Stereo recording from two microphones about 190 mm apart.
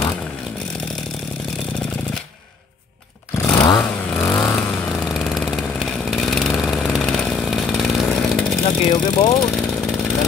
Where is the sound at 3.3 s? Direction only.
15° left (ahead or behind).